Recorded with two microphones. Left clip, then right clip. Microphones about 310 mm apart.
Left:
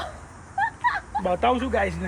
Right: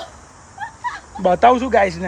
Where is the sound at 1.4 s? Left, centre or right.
Right.